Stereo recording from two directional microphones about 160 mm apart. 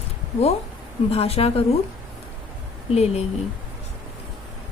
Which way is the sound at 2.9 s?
40° left (ahead or behind).